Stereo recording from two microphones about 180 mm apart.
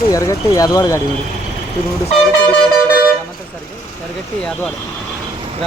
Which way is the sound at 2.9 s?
55° left (ahead or behind).